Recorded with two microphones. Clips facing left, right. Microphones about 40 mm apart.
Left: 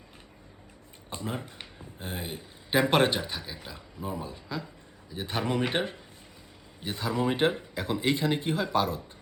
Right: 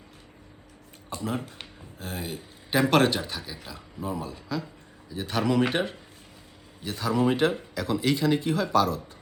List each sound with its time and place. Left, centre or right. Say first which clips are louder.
1.1 s speech: right 4 dB; left